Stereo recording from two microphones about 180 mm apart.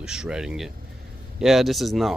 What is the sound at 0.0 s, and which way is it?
Speech, 5° right (ahead or behind).